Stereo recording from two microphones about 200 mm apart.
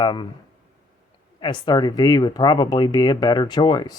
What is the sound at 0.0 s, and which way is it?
Speech, 25° left (ahead or behind).